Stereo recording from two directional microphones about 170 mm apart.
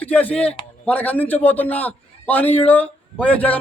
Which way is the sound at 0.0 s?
10° left (ahead or behind).